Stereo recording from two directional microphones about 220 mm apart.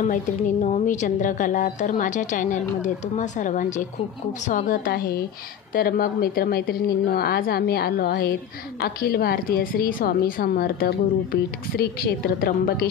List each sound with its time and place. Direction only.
0.0 s a woman's voice: 30° left (ahead or behind)